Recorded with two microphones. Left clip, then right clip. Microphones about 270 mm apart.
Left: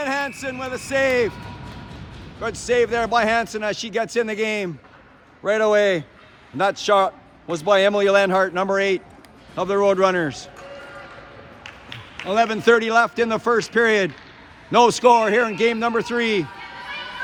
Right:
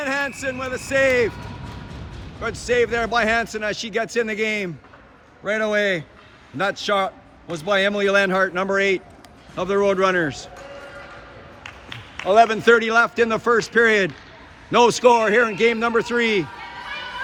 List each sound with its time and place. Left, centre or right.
0.0 s speech: centre
2.4 s a man's voice: centre
11.6 s a sound: right
12.3 s a man's voice: centre